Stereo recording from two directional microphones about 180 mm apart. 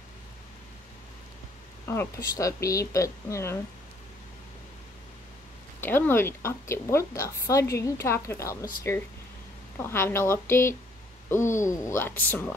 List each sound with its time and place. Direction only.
1.9 s a woman's voice: 15° left (ahead or behind)
5.8 s a woman's voice: 10° left (ahead or behind)